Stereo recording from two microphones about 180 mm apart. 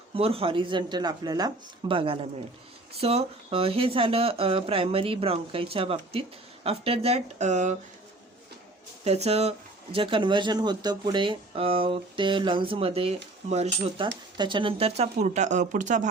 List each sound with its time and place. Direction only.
0.1 s speech: 30° right (ahead or behind)
9.0 s speech: 35° right (ahead or behind)
14.3 s speech: 25° right (ahead or behind); by 16.0 s 45° right (ahead or behind)